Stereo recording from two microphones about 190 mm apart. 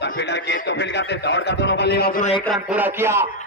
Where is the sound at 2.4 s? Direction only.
Centre (ahead or behind).